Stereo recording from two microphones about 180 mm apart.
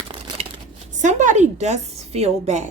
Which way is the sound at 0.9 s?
40° right (ahead or behind).